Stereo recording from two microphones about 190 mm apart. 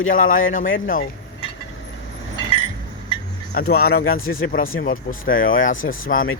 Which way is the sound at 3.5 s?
50° left (ahead or behind).